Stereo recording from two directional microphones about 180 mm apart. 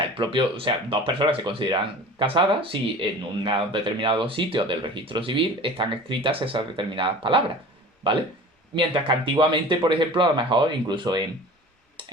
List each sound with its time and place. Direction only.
0.0 s speech: 30° right (ahead or behind)